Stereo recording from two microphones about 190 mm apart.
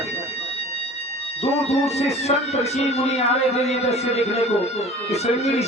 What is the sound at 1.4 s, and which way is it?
Speech, 35° left (ahead or behind).